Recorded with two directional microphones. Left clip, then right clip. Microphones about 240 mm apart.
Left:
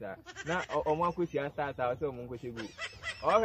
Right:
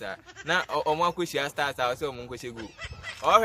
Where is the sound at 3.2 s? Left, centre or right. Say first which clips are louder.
Right 7 dB; centre.